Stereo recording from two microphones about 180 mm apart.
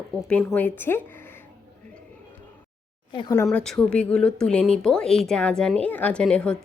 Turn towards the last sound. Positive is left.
turn(degrees=5)  # may be behind; listen again after turning